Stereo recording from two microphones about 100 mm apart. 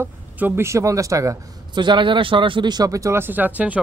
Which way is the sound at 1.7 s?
50° right (ahead or behind).